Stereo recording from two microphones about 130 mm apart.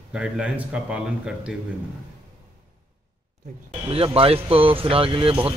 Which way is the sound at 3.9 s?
50° right (ahead or behind).